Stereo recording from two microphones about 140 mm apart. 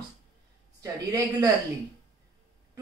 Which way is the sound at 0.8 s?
25° right (ahead or behind).